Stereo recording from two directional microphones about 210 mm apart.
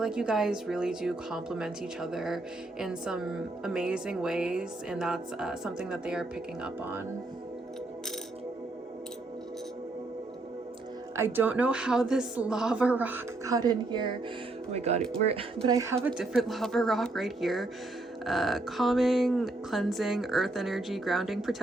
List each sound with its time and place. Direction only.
0.0 s a woman's voice: 5° right (ahead or behind)
11.2 s speech: 10° right (ahead or behind)
14.7 s speech: 30° right (ahead or behind)
15.6 s speech: 15° right (ahead or behind)
16.0 s a woman's voice: centre (ahead or behind)